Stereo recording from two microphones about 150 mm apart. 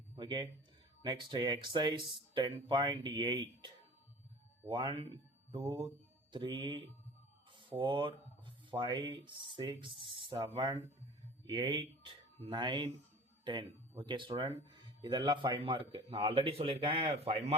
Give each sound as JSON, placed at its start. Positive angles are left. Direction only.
{"t": 0.2, "sound": "speech", "side_deg": -30}
{"t": 4.7, "sound": "speech", "side_deg": -35}